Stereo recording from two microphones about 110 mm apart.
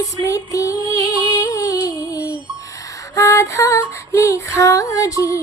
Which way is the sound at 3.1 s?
30° left (ahead or behind).